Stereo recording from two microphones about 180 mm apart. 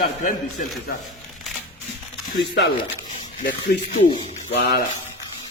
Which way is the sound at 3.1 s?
45° left (ahead or behind).